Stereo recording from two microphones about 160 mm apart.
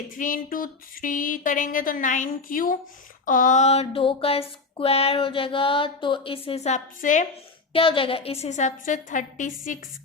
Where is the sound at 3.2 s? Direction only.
55° left (ahead or behind).